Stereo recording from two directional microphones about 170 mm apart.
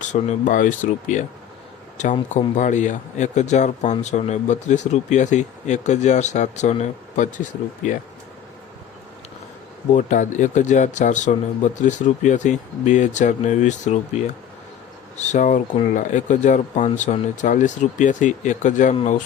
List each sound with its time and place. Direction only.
0.0 s speech: 45° left (ahead or behind)
9.9 s speech: 45° left (ahead or behind)